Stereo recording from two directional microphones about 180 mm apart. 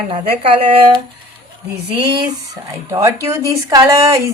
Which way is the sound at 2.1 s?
20° right (ahead or behind).